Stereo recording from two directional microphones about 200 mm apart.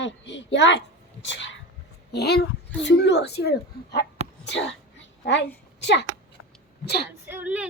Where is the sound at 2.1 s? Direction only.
55° left (ahead or behind).